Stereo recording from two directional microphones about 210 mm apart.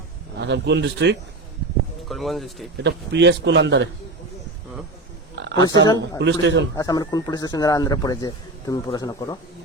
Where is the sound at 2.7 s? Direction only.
55° right (ahead or behind).